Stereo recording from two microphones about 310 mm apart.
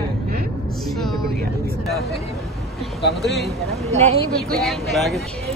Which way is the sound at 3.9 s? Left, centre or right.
Right.